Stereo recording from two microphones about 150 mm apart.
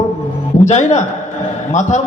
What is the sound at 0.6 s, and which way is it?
A man's voice, 50° left (ahead or behind).